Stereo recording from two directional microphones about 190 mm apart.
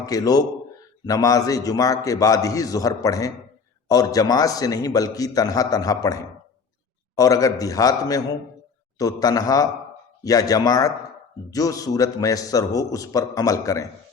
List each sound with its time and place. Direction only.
0.0 s a man's voice: 20° left (ahead or behind)
7.2 s a man's voice: 20° left (ahead or behind)